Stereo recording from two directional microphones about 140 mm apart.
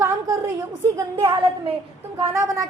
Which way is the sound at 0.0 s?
25° right (ahead or behind).